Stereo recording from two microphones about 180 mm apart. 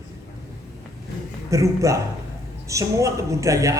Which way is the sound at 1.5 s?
15° right (ahead or behind).